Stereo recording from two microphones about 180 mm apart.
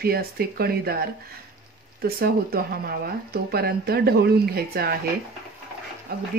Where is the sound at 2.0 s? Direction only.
55° right (ahead or behind).